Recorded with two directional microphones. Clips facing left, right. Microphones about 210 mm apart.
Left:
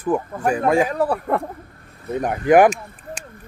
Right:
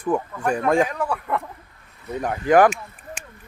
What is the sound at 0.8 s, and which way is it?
Speech, 35° left (ahead or behind).